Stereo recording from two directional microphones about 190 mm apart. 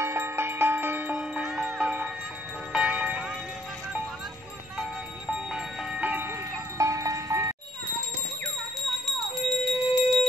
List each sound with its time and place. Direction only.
0.0 s music: 15° right (ahead or behind)
5.3 s music: 5° right (ahead or behind)
9.0 s a sound: centre (ahead or behind)